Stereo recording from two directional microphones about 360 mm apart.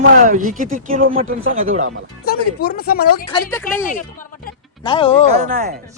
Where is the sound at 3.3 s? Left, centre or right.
Centre.